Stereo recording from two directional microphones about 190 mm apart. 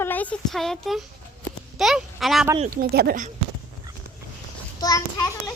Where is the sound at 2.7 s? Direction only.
55° right (ahead or behind).